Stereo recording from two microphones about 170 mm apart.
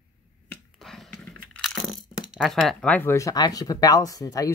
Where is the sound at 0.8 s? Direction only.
Centre (ahead or behind).